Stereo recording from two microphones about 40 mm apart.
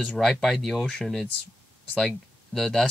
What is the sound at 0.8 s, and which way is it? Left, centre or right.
Speech, centre.